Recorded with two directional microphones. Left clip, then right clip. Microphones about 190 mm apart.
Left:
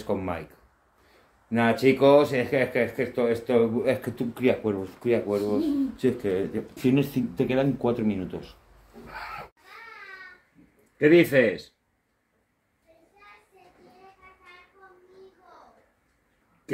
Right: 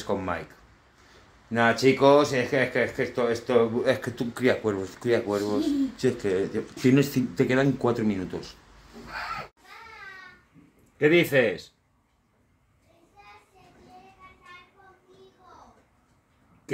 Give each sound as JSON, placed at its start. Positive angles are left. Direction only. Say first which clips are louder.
{"t": 0.0, "sound": "speech", "louder": "right 1 dB", "side_deg": 0}
{"t": 1.5, "sound": "speech", "louder": "right 1 dB", "side_deg": 0}
{"t": 6.8, "sound": "speech", "louder": "right 2 dB", "side_deg": -15}
{"t": 11.0, "sound": "speech", "louder": "left 2 dB", "side_deg": 0}